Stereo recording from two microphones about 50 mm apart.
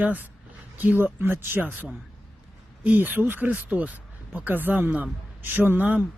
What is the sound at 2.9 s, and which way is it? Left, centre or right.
Speech, right.